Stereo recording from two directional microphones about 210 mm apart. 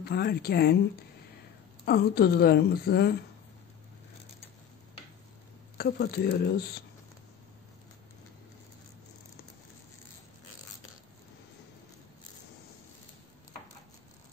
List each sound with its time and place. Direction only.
0.0 s a woman's voice: 50° left (ahead or behind)
1.9 s a woman's voice: 50° left (ahead or behind)
5.8 s a woman's voice: 50° left (ahead or behind)